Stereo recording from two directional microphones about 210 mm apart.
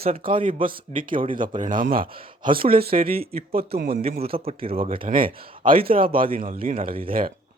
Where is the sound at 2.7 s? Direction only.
45° right (ahead or behind).